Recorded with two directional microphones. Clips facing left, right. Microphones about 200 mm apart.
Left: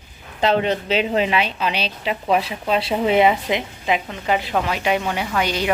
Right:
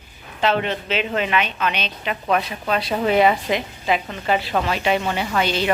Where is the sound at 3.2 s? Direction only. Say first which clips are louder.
Even; 15° left (ahead or behind).